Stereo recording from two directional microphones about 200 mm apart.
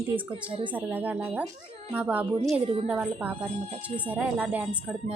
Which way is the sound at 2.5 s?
30° right (ahead or behind).